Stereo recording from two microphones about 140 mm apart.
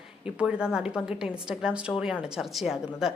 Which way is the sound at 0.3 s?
5° right (ahead or behind).